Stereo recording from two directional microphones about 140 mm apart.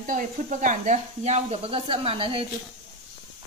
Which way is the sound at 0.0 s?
70° right (ahead or behind).